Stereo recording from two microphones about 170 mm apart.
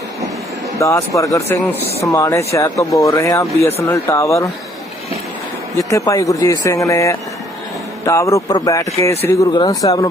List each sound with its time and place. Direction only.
0.8 s a man's voice: 20° left (ahead or behind)
5.7 s a man's voice: 20° left (ahead or behind)